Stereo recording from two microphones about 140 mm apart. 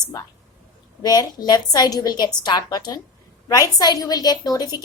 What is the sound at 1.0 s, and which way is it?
A woman's voice, 25° left (ahead or behind).